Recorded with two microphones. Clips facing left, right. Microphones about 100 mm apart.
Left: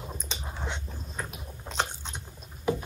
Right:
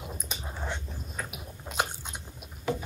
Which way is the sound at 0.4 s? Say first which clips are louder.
Even; centre (ahead or behind).